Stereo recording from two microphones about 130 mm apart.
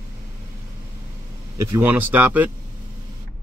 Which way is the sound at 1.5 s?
25° right (ahead or behind).